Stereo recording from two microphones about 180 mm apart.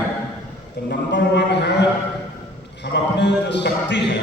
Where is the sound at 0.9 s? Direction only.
70° left (ahead or behind).